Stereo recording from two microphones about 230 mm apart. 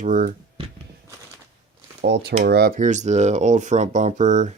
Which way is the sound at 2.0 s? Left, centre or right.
Right.